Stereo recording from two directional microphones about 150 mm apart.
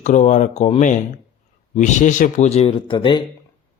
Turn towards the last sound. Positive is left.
turn(degrees=30)  # may be behind; listen again after turning